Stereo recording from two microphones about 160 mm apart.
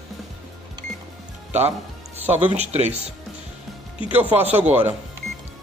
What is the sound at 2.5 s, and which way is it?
Speech, 40° right (ahead or behind).